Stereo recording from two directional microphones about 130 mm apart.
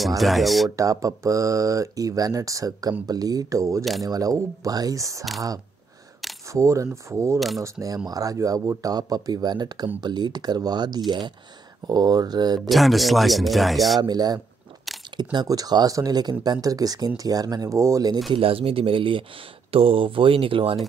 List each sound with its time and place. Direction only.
0.2 s speech: centre (ahead or behind)
0.7 s speech: 25° right (ahead or behind)
6.4 s speech: 25° right (ahead or behind)
7.3 s speech: centre (ahead or behind)
7.6 s speech: 25° right (ahead or behind)
12.6 s speech: centre (ahead or behind)
14.0 s speech: 30° right (ahead or behind)
14.9 s a sound: centre (ahead or behind)
15.3 s speech: 30° right (ahead or behind)
18.3 s speech: 45° right (ahead or behind)